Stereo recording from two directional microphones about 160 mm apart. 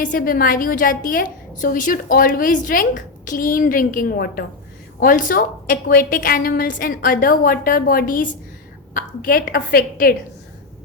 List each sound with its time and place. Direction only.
0.0 s a woman's voice: 60° left (ahead or behind)